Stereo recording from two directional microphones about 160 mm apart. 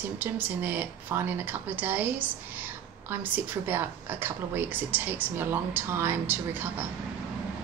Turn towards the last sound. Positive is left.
turn(degrees=-15)  # may be behind; listen again after turning